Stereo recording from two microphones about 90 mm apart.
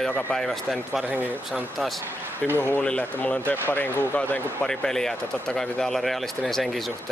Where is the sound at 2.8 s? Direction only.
15° left (ahead or behind).